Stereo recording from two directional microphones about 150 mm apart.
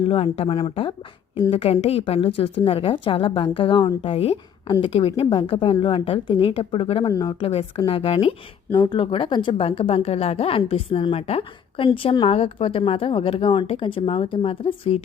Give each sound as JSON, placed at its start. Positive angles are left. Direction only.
{"t": 0.1, "sound": "speech", "side_deg": 40}